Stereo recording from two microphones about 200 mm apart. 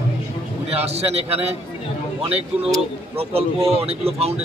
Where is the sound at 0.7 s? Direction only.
30° right (ahead or behind).